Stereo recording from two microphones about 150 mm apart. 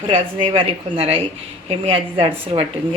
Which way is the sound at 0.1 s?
35° right (ahead or behind).